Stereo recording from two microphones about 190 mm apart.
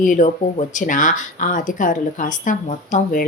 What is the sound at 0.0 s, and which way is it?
Speech, 45° left (ahead or behind).